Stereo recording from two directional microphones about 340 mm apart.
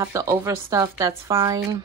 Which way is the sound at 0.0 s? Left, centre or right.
Centre.